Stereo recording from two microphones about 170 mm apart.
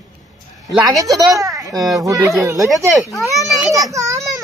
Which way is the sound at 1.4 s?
20° right (ahead or behind).